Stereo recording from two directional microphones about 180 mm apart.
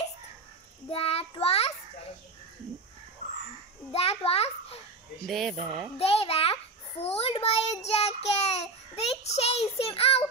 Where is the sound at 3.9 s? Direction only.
35° left (ahead or behind).